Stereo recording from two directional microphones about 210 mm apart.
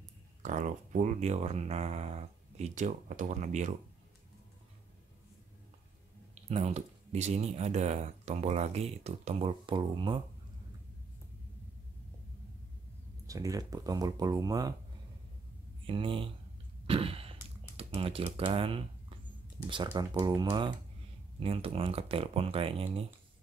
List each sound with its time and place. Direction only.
0.4 s speech: 35° right (ahead or behind)
6.3 s speech: 30° right (ahead or behind)
13.3 s speech: 15° right (ahead or behind)
15.9 s speech: 25° right (ahead or behind)
16.8 s a sound: 25° right (ahead or behind)
17.7 s speech: 25° right (ahead or behind)